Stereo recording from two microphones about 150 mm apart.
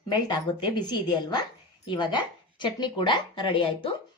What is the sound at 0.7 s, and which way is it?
A woman's voice, 30° left (ahead or behind).